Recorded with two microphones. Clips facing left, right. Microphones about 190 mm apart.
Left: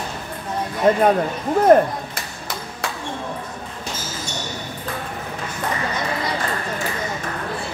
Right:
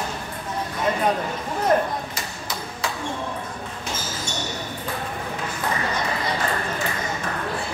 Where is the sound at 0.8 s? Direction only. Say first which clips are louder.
Left 7 dB; 50° left (ahead or behind).